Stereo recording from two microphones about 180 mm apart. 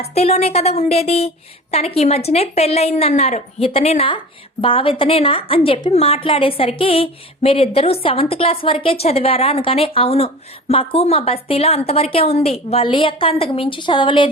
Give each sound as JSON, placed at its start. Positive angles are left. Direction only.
{"t": 0.0, "sound": "a woman's voice", "side_deg": 35}